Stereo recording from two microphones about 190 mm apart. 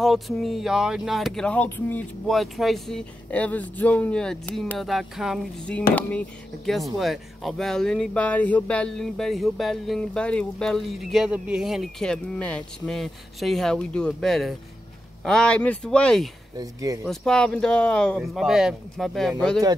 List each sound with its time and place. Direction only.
0.0 s speech: centre (ahead or behind)
16.5 s speech: 20° right (ahead or behind)
17.0 s speech: centre (ahead or behind)